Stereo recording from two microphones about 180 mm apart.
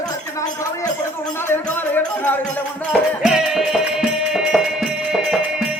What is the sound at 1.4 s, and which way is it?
Speech, 10° left (ahead or behind).